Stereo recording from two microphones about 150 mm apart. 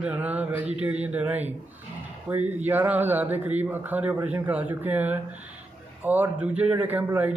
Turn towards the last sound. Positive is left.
turn(degrees=-15)  # may be behind; listen again after turning